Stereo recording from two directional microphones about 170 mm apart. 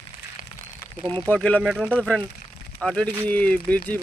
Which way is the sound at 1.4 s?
5° left (ahead or behind).